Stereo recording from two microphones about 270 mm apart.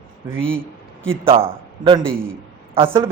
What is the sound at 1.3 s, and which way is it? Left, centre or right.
A man's voice, centre.